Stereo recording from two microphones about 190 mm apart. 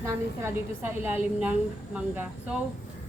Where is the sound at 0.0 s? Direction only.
15° right (ahead or behind).